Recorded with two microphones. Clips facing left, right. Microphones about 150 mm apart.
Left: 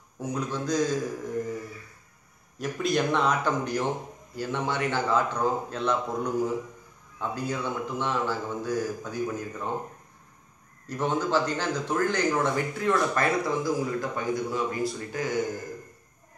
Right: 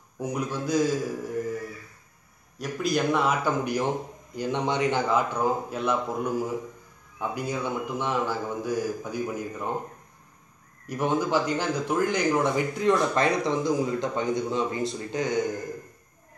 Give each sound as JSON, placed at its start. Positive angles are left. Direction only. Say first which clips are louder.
{"t": 0.2, "sound": "a man's voice", "louder": "right 1 dB", "side_deg": -10}
{"t": 2.6, "sound": "a man's voice", "louder": "even", "side_deg": 0}
{"t": 10.9, "sound": "speech", "louder": "right 1 dB", "side_deg": -15}